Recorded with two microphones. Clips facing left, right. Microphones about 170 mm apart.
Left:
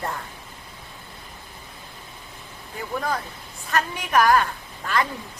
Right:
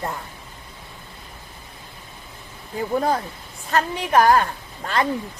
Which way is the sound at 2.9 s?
30° right (ahead or behind).